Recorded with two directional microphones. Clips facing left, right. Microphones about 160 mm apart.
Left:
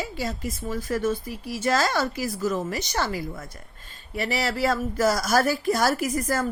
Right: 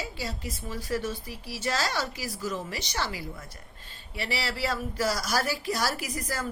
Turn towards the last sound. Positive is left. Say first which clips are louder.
# left 8 dB
turn(degrees=50)  # may be behind; listen again after turning